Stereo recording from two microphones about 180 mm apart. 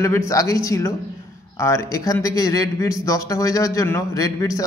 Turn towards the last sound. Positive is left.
turn(degrees=15)  # may be behind; listen again after turning